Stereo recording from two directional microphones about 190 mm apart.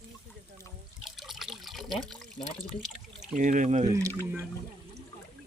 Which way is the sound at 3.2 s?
40° right (ahead or behind).